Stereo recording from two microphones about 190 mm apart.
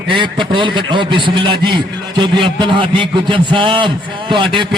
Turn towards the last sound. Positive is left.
turn(degrees=-25)  # may be behind; listen again after turning